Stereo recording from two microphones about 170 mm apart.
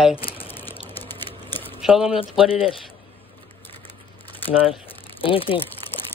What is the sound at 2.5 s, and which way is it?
Speech, 35° left (ahead or behind).